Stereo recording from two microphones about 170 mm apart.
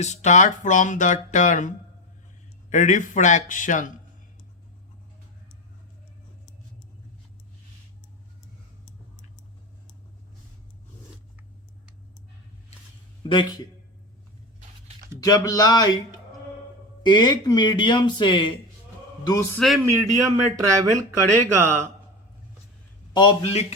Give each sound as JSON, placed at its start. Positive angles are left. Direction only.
{"t": 0.0, "sound": "speech", "side_deg": 45}
{"t": 13.2, "sound": "speech", "side_deg": 30}
{"t": 15.2, "sound": "speech", "side_deg": 20}
{"t": 19.5, "sound": "speech", "side_deg": 0}
{"t": 20.2, "sound": "a man's voice", "side_deg": -20}
{"t": 23.1, "sound": "a man's voice", "side_deg": 30}